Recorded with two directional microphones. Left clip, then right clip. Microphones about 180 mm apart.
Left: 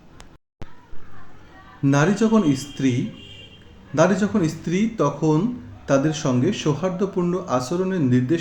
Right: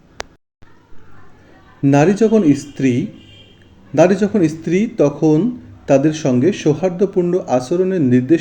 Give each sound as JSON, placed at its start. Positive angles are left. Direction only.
{"t": 1.8, "sound": "speech", "side_deg": -20}